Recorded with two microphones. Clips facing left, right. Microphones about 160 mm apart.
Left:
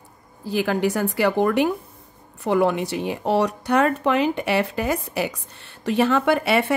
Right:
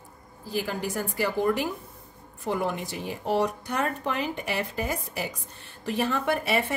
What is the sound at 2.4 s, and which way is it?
Speech, 80° left.